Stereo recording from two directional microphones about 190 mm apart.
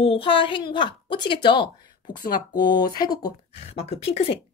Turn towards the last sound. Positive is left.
turn(degrees=30)  # may be behind; listen again after turning